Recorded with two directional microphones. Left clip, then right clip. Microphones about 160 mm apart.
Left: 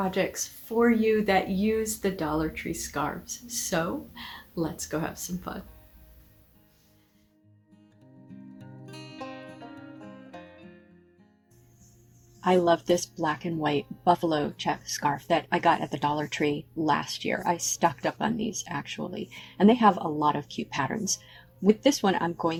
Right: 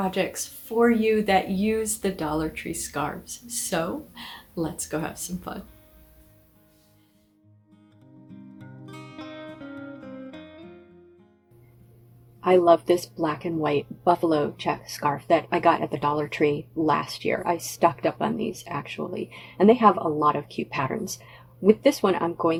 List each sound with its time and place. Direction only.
0.0 s speech: 5° right (ahead or behind)
12.4 s speech: 65° left (ahead or behind)
12.8 s speech: 50° left (ahead or behind)